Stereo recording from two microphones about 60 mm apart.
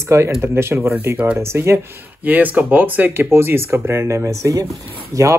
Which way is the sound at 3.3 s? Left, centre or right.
Right.